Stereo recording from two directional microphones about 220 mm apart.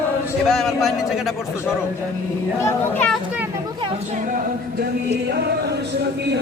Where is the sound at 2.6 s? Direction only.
10° left (ahead or behind).